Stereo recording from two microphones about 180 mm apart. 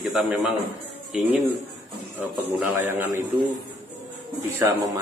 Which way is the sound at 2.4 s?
10° right (ahead or behind).